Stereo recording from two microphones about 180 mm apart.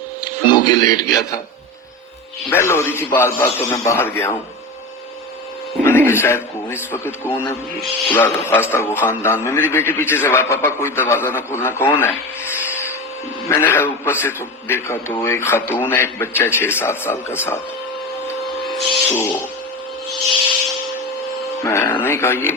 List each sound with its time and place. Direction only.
0.4 s speech: 25° left (ahead or behind)
1.0 s a man's voice: 5° right (ahead or behind)
2.5 s a man's voice: 15° left (ahead or behind)
6.1 s a man's voice: 15° left (ahead or behind)
11.9 s rub: 15° left (ahead or behind)
13.5 s a man's voice: 15° left (ahead or behind)
18.6 s filing: centre (ahead or behind)
19.0 s a man's voice: 15° left (ahead or behind)
21.6 s a man's voice: 15° left (ahead or behind)